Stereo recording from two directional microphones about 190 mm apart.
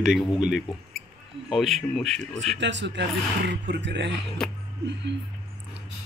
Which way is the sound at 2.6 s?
70° right (ahead or behind).